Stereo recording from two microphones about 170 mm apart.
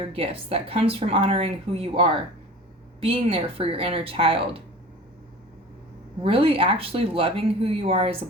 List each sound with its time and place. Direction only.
0.1 s speech: 35° right (ahead or behind)
6.2 s speech: 35° right (ahead or behind)